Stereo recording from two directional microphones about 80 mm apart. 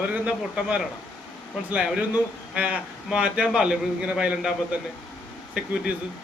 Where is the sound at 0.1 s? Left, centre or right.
Centre.